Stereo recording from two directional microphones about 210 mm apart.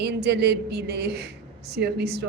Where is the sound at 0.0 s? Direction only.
50° right (ahead or behind).